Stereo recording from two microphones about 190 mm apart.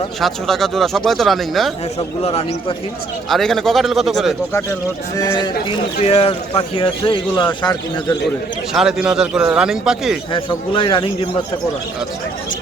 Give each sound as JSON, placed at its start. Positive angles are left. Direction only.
{"t": 0.2, "sound": "speech", "side_deg": 0}
{"t": 2.2, "sound": "a man's voice", "side_deg": 30}
{"t": 3.2, "sound": "speech", "side_deg": 0}
{"t": 4.5, "sound": "speech", "side_deg": 20}
{"t": 8.7, "sound": "speech", "side_deg": -5}
{"t": 10.3, "sound": "speech", "side_deg": 25}